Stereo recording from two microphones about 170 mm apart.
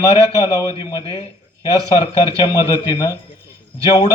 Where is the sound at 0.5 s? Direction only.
20° left (ahead or behind).